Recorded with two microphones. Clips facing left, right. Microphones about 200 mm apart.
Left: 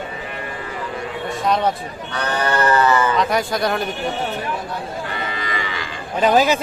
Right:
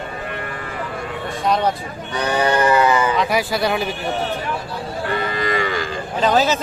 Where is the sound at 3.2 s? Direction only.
5° right (ahead or behind).